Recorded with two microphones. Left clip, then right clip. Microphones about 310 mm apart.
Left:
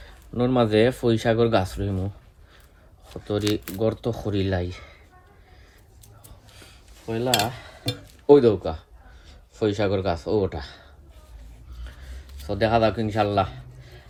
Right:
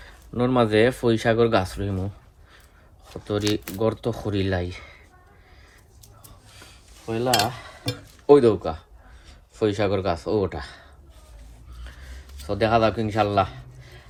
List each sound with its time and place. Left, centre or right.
0.0 s speech: right
3.8 s speech: right
6.6 s cutlery: centre
9.6 s speech: right
11.9 s vehicle: right
12.5 s speech: centre
13.3 s a sound: centre